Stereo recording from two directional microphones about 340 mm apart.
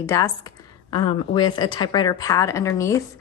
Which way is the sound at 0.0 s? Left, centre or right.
Centre.